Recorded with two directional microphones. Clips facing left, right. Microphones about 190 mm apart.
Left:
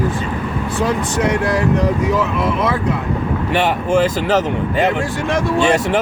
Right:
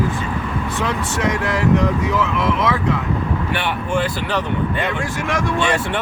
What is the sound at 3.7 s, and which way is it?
Speech, 40° left (ahead or behind).